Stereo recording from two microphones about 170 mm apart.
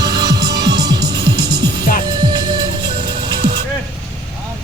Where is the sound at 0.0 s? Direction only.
25° right (ahead or behind).